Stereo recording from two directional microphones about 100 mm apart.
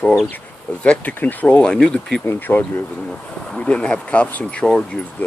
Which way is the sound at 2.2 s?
20° left (ahead or behind).